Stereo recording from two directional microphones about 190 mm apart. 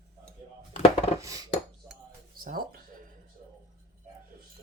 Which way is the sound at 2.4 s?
50° right (ahead or behind).